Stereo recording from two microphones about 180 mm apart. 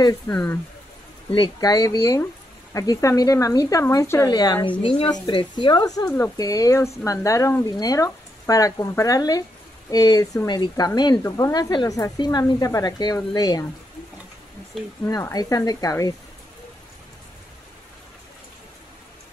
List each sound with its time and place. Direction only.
0.3 s a woman's voice: 10° left (ahead or behind)
1.3 s a woman's voice: 25° left (ahead or behind)
14.7 s speech: centre (ahead or behind)
15.0 s a woman's voice: 20° left (ahead or behind)